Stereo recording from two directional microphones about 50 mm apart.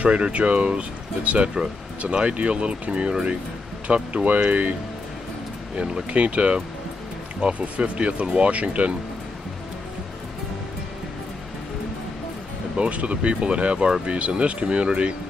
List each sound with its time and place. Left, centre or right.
0.0 s speech: right
5.8 s speech: right
12.7 s speech: right